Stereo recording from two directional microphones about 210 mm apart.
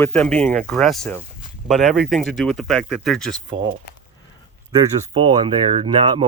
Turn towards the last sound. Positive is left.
turn(degrees=-25)  # may be behind; listen again after turning